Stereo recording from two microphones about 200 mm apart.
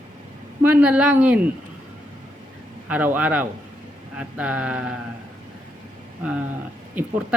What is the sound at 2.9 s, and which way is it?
Speech, 5° right (ahead or behind).